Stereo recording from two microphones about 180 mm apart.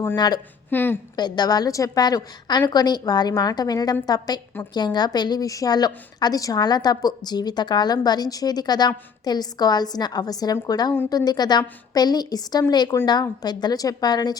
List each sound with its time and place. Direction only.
0.7 s speech: 10° left (ahead or behind)
1.1 s a woman's voice: 25° left (ahead or behind)